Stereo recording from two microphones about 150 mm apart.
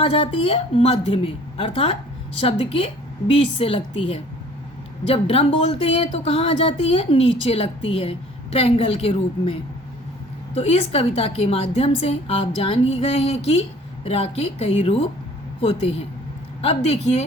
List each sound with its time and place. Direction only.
0.0 s a woman's voice: 40° left (ahead or behind)